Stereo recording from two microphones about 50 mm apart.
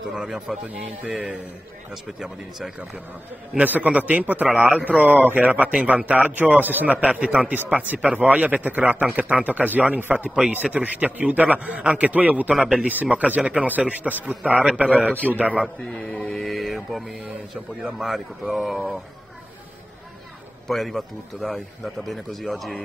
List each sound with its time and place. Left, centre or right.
0.1 s speech: centre
3.6 s a man's voice: right
7.1 s a man's voice: right
12.5 s speech: centre
12.8 s a man's voice: right
15.9 s mantra: centre
16.4 s mantra: centre
17.9 s speech: centre
20.6 s speech: centre